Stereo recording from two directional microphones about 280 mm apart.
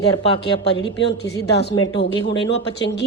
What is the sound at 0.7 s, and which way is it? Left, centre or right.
A woman's voice, left.